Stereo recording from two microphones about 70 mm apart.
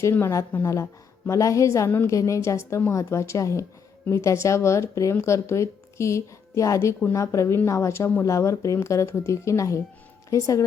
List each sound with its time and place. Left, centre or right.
0.0 s a woman's voice: left